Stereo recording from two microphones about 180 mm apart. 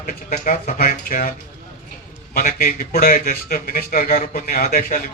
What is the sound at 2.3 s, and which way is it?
Speech, 55° left (ahead or behind).